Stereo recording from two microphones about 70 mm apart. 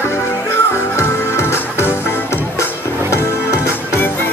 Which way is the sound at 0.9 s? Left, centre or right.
Left.